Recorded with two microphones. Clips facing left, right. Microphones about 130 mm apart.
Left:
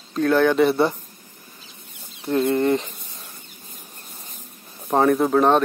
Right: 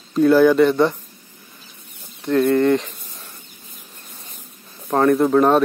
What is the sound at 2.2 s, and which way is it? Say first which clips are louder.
Speech: right 4 dB; 25° left (ahead or behind).